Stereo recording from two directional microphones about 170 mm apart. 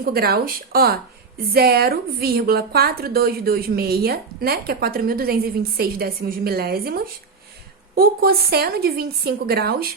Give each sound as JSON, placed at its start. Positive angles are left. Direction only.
{"t": 0.0, "sound": "a woman's voice", "side_deg": -65}